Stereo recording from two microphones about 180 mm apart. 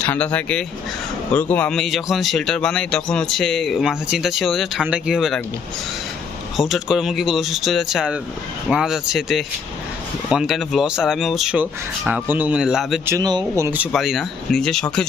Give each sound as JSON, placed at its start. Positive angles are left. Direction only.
{"t": 0.0, "sound": "a man's voice", "side_deg": 10}
{"t": 6.6, "sound": "a man's voice", "side_deg": 0}
{"t": 13.1, "sound": "speech", "side_deg": -20}
{"t": 13.9, "sound": "a man's voice", "side_deg": 0}